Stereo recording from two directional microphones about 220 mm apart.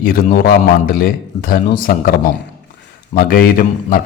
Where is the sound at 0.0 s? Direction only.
40° left (ahead or behind).